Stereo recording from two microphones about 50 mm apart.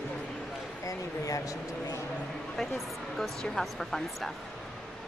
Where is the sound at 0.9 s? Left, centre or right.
Left.